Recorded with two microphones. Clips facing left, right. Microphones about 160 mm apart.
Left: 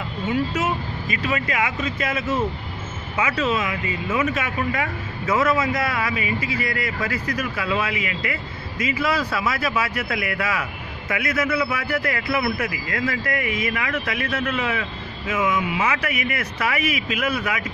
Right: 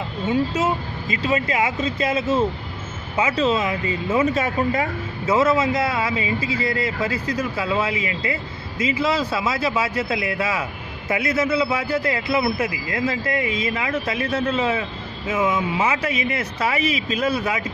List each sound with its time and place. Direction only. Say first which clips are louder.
0.3 s speech: right 2 dB; 30° right (ahead or behind)